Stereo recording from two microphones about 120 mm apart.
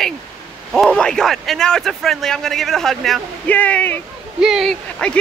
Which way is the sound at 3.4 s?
10° left (ahead or behind).